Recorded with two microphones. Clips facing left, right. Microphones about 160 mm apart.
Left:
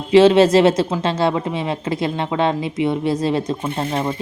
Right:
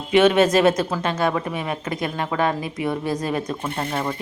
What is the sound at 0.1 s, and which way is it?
Speech, 30° left (ahead or behind).